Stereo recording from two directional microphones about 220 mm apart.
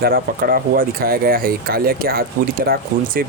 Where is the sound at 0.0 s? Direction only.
40° right (ahead or behind).